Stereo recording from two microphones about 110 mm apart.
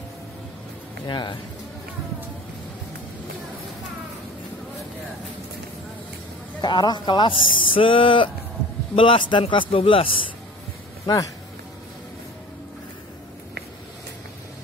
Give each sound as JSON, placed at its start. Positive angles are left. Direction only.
{"t": 1.0, "sound": "speech", "side_deg": 40}
{"t": 6.6, "sound": "a man's voice", "side_deg": 40}